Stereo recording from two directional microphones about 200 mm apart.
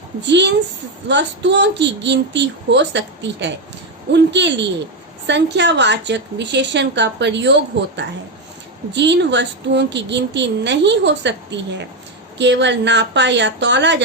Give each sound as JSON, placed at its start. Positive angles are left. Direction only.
{"t": 0.2, "sound": "a woman's voice", "side_deg": -60}